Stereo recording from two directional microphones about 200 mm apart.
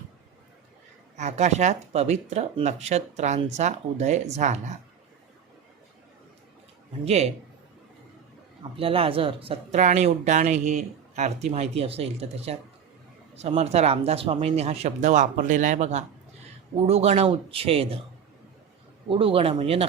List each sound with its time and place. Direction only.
1.1 s speech: 35° right (ahead or behind)
7.0 s speech: 30° right (ahead or behind)
8.7 s speech: 30° right (ahead or behind)
19.0 s speech: 25° right (ahead or behind)